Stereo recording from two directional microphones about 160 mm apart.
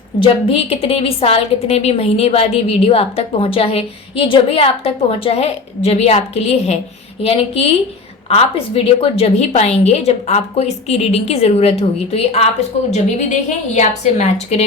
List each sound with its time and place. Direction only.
0.2 s a woman's voice: 35° left (ahead or behind)
13.7 s a woman's voice: 45° left (ahead or behind)